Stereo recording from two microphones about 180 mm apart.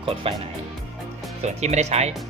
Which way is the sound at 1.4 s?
40° right (ahead or behind).